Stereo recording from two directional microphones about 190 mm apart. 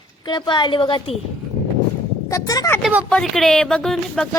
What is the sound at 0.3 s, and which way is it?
Speech, 25° left (ahead or behind).